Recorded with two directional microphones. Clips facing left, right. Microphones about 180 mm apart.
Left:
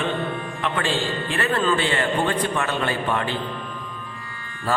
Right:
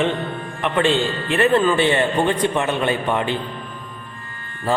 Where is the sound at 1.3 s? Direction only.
20° right (ahead or behind).